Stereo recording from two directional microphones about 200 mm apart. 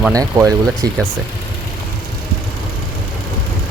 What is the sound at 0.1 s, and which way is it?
Speech, 15° right (ahead or behind).